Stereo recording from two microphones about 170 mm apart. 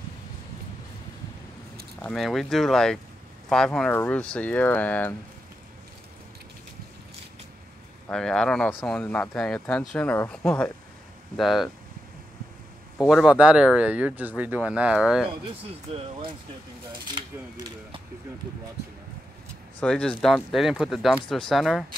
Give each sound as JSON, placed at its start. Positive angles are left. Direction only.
{"t": 2.0, "sound": "speech", "side_deg": 5}
{"t": 8.1, "sound": "speech", "side_deg": 5}
{"t": 13.1, "sound": "speech", "side_deg": -5}
{"t": 15.9, "sound": "speech", "side_deg": -35}
{"t": 19.8, "sound": "speech", "side_deg": 5}